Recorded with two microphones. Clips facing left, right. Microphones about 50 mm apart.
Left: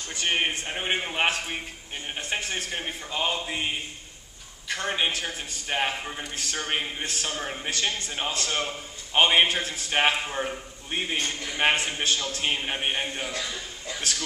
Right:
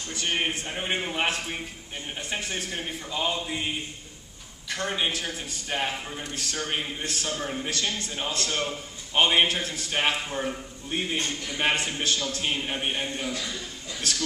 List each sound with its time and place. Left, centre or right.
0.1 s a man's voice: left
2.1 s a man's voice: left
4.7 s a man's voice: centre